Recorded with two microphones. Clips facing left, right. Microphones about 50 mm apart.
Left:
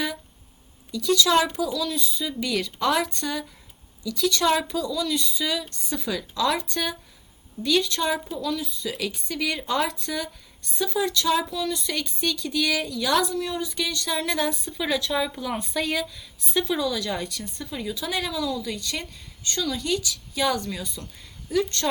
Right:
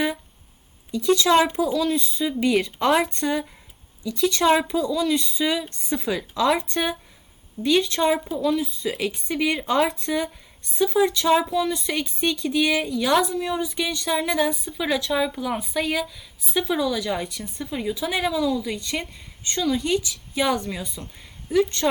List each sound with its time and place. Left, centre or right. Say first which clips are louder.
0.9 s speech: right 3 dB; right